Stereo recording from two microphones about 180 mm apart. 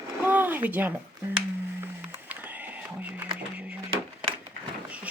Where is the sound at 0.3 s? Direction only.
10° right (ahead or behind).